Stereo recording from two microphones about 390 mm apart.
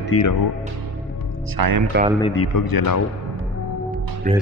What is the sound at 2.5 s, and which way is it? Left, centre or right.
Speech, left.